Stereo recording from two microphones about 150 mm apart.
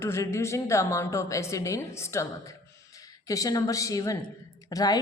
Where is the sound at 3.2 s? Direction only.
25° left (ahead or behind).